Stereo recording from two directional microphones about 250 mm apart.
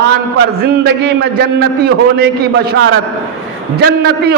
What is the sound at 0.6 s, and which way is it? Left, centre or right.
Speech, right.